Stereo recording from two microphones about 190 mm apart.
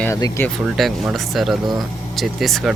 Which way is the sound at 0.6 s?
Centre (ahead or behind).